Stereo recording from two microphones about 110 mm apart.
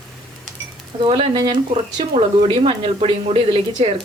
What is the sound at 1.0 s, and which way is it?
Speech, 55° right (ahead or behind).